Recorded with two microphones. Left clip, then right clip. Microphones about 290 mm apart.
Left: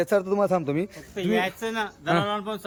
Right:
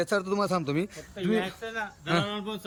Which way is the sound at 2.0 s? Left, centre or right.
Centre.